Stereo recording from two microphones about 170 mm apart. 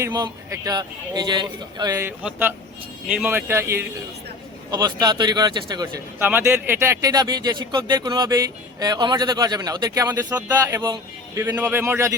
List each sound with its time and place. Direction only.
0.0 s a man's voice: 20° right (ahead or behind)
6.1 s a man's voice: 10° right (ahead or behind)